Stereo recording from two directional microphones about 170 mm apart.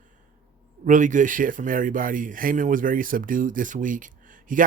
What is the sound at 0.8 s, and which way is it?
Speech, 50° right (ahead or behind).